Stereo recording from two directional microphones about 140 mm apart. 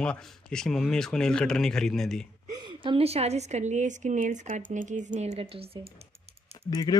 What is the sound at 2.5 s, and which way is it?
A woman's voice, 35° right (ahead or behind).